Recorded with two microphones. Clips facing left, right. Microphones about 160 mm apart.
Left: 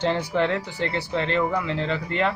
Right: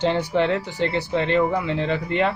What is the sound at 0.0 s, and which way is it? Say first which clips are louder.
Speech: right 2 dB; 20° right (ahead or behind).